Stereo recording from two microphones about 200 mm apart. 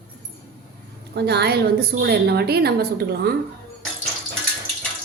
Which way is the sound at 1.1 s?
55° right (ahead or behind).